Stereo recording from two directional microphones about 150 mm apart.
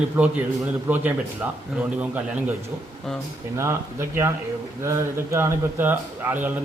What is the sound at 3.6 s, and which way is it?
A man's voice, 15° right (ahead or behind).